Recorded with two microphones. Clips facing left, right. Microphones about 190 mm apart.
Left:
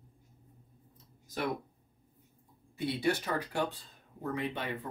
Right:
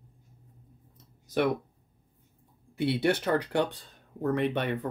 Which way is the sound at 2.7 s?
70° right (ahead or behind).